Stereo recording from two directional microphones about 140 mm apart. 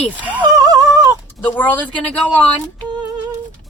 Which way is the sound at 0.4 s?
25° right (ahead or behind).